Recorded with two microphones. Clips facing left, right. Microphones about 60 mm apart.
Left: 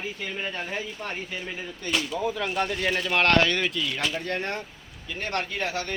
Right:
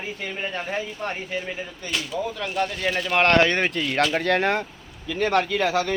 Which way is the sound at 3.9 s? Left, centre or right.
Right.